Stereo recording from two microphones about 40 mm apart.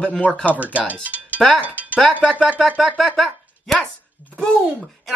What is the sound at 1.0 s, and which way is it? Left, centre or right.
Music, right.